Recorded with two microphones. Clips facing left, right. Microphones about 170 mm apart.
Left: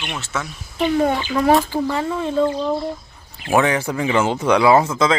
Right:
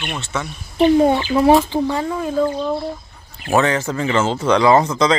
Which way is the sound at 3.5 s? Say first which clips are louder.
Even; 10° left (ahead or behind).